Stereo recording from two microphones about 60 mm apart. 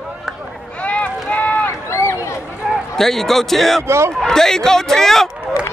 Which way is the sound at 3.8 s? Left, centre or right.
Right.